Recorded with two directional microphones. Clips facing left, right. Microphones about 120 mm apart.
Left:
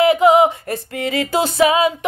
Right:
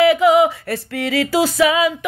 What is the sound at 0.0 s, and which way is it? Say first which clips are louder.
Female singing: even; 25° left (ahead or behind).